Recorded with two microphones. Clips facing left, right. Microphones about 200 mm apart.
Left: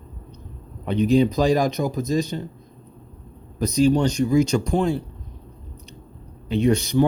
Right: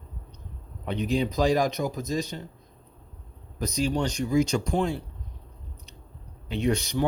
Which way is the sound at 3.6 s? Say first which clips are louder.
Left 8 dB; 30° left (ahead or behind).